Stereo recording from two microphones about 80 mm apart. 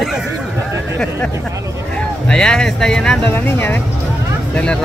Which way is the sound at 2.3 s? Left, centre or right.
Centre.